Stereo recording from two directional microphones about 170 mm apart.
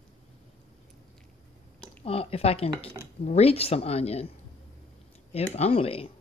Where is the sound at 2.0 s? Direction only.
35° left (ahead or behind).